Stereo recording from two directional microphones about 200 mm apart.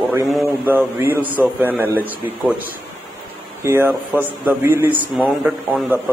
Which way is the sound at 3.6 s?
10° right (ahead or behind).